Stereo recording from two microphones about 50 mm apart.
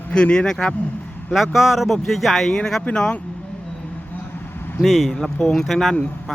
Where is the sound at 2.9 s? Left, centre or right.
Centre.